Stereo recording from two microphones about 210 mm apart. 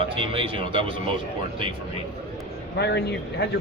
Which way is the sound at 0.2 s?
25° right (ahead or behind).